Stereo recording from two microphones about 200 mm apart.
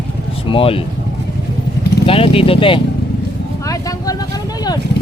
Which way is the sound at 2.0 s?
30° left (ahead or behind).